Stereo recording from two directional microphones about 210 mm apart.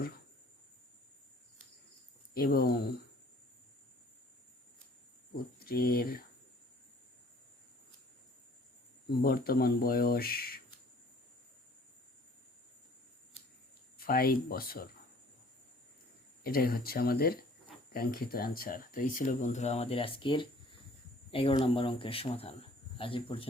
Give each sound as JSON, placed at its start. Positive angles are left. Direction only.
{"t": 2.3, "sound": "speech", "side_deg": 45}
{"t": 5.5, "sound": "speech", "side_deg": 45}
{"t": 9.0, "sound": "speech", "side_deg": 45}
{"t": 14.0, "sound": "speech", "side_deg": 45}
{"t": 16.4, "sound": "speech", "side_deg": 45}